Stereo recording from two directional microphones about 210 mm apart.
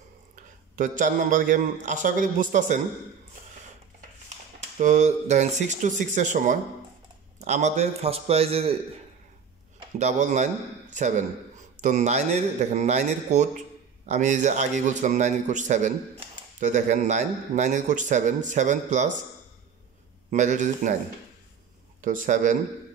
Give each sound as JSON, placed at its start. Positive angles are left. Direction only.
{"t": 0.7, "sound": "speech", "side_deg": -40}
{"t": 4.7, "sound": "a man's voice", "side_deg": -35}
{"t": 9.9, "sound": "speech", "side_deg": -35}
{"t": 20.2, "sound": "speech", "side_deg": -35}
{"t": 22.0, "sound": "speech", "side_deg": -40}